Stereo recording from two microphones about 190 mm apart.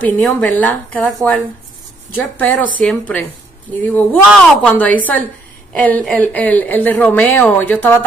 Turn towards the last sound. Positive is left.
turn(degrees=10)  # may be behind; listen again after turning